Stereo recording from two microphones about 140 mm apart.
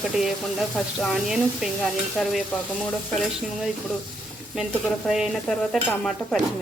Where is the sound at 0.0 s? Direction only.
Centre (ahead or behind).